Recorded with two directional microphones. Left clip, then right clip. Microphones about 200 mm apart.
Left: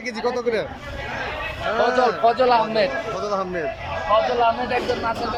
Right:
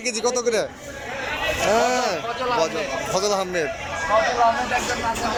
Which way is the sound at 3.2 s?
Centre (ahead or behind).